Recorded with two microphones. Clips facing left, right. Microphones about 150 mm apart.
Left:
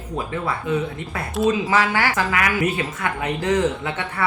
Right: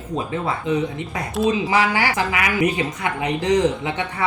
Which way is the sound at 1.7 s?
15° right (ahead or behind).